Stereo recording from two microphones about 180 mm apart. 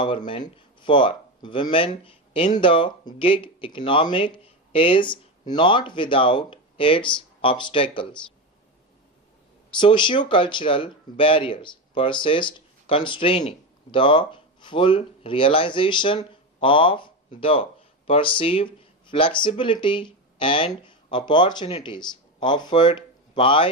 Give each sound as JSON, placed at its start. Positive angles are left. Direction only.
{"t": 0.0, "sound": "speech", "side_deg": 30}
{"t": 9.7, "sound": "speech", "side_deg": 25}